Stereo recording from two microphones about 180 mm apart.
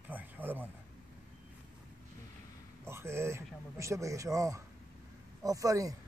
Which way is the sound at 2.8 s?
15° right (ahead or behind).